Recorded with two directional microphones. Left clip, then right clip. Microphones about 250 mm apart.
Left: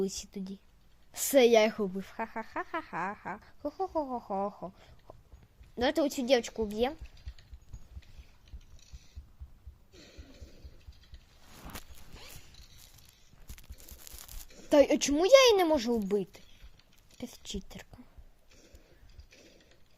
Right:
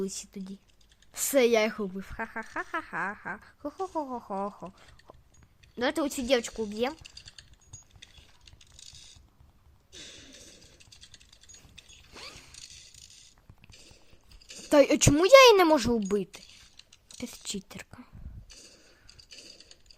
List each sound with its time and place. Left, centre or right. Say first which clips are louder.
0.0 s a woman's voice: left 1 dB; centre
9.9 s a sound: right 8 dB; right
14.7 s speech: right 3 dB; right